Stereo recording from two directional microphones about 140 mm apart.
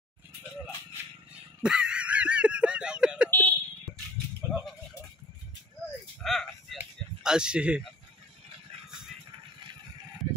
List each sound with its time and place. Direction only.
1.6 s honk: 5° right (ahead or behind)
3.3 s vehicle: 15° left (ahead or behind)
4.4 s goat: 20° right (ahead or behind)
6.2 s a sound: centre (ahead or behind)